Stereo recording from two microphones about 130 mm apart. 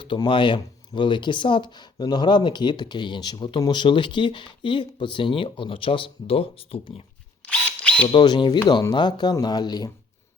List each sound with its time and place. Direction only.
0.0 s speech: 40° left (ahead or behind)
7.4 s drill: 10° left (ahead or behind)
8.0 s speech: 35° left (ahead or behind)